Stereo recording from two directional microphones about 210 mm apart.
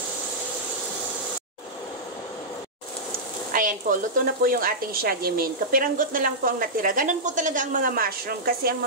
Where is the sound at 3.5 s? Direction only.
40° right (ahead or behind).